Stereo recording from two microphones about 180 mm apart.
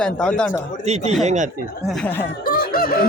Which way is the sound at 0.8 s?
35° right (ahead or behind).